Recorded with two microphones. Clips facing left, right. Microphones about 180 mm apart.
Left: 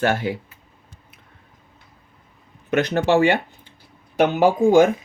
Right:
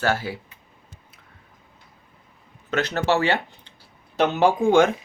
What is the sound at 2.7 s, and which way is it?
Speech, 15° left (ahead or behind).